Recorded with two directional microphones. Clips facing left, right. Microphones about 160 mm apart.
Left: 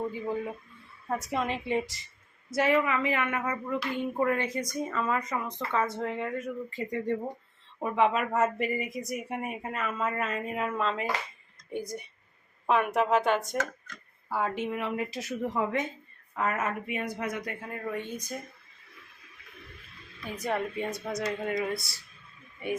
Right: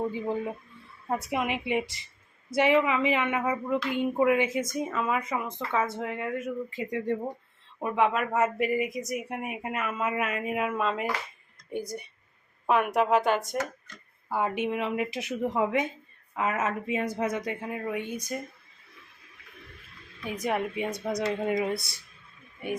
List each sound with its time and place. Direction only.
0.1 s a woman's voice: 25° right (ahead or behind); by 4.6 s 5° right (ahead or behind)
4.6 s a woman's voice: 20° right (ahead or behind)
5.5 s a woman's voice: 5° right (ahead or behind)
12.6 s speech: 5° right (ahead or behind)
14.3 s a woman's voice: 20° right (ahead or behind)
20.3 s a woman's voice: 10° right (ahead or behind)